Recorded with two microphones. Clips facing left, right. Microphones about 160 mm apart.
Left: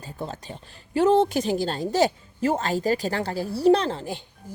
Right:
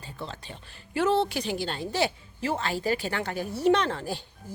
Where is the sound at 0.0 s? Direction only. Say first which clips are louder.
Left 5 dB; 45° left (ahead or behind).